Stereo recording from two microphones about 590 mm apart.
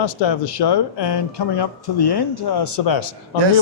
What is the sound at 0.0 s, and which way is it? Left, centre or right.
A man's voice, left.